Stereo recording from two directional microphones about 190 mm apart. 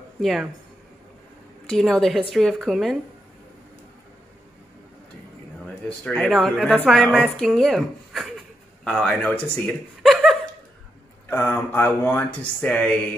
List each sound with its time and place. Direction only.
0.2 s speech: centre (ahead or behind)
1.7 s speech: centre (ahead or behind)
6.0 s speech: 5° left (ahead or behind)
11.2 s speech: 10° left (ahead or behind)